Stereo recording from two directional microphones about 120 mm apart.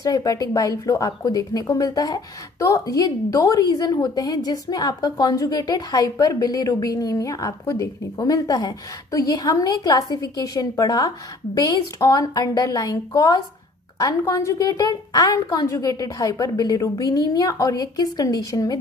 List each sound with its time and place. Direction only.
0.0 s speech: 30° left (ahead or behind)